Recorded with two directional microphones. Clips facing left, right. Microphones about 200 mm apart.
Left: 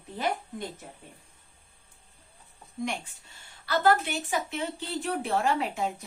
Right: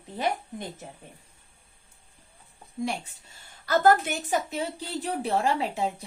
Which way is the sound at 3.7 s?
45° right (ahead or behind).